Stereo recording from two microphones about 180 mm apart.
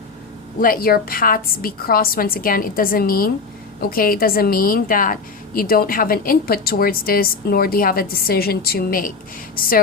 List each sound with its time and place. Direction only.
0.6 s a woman's voice: 55° left (ahead or behind)